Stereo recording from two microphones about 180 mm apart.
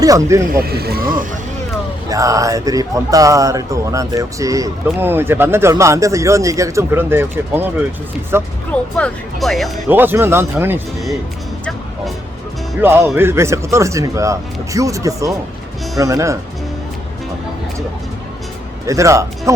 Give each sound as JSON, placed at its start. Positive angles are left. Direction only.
{"t": 0.0, "sound": "speech", "side_deg": -20}
{"t": 0.6, "sound": "speech", "side_deg": -60}
{"t": 2.0, "sound": "speech", "side_deg": -20}
{"t": 8.7, "sound": "speech", "side_deg": 5}
{"t": 9.9, "sound": "speech", "side_deg": -10}
{"t": 12.8, "sound": "speech", "side_deg": -15}
{"t": 18.9, "sound": "speech", "side_deg": -15}